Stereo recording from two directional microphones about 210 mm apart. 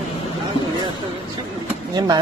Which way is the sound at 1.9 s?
20° right (ahead or behind).